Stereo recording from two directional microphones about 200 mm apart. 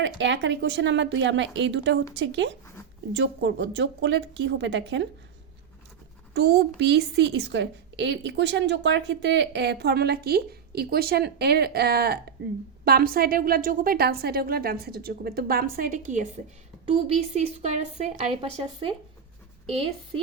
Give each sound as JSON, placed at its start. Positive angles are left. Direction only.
{"t": 0.0, "sound": "a woman's voice", "side_deg": -65}
{"t": 6.3, "sound": "a woman's voice", "side_deg": -55}